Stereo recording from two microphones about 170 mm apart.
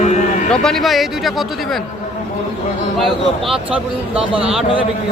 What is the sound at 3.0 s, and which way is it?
A man's voice, centre (ahead or behind).